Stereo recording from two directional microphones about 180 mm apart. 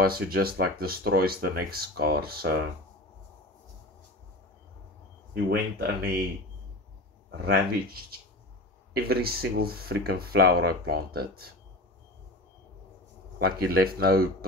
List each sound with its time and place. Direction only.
0.0 s speech: 55° right (ahead or behind)
5.3 s speech: 60° right (ahead or behind)
7.2 s speech: 60° right (ahead or behind)
13.4 s speech: 60° right (ahead or behind)